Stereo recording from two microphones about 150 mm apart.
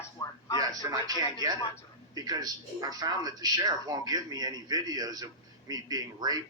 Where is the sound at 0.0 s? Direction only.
25° left (ahead or behind).